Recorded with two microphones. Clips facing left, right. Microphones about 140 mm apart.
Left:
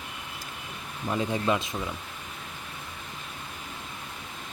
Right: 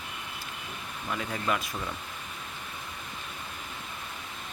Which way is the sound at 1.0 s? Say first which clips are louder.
Left 5 dB; 25° left (ahead or behind).